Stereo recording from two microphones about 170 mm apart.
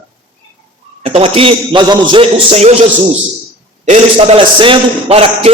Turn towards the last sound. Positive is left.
turn(degrees=-35)  # may be behind; listen again after turning